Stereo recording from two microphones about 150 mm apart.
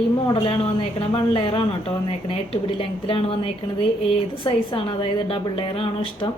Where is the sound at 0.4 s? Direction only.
35° left (ahead or behind).